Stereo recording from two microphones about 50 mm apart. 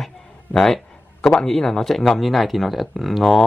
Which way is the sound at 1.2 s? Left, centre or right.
Centre.